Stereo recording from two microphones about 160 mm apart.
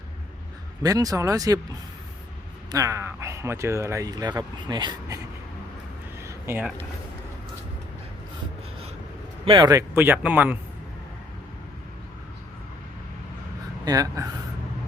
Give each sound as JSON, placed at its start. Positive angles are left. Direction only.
{"t": 0.8, "sound": "speech", "side_deg": -20}
{"t": 2.7, "sound": "speech", "side_deg": -20}
{"t": 6.2, "sound": "a sound", "side_deg": -15}
{"t": 9.5, "sound": "speech", "side_deg": -25}
{"t": 13.8, "sound": "speech", "side_deg": -20}